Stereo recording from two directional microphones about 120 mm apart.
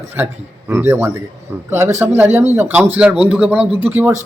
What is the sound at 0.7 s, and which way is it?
A man's voice, 20° right (ahead or behind).